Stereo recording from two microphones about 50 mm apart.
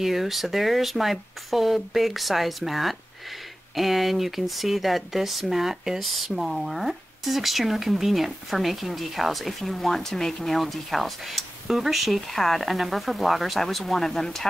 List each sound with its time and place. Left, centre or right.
0.0 s speech: centre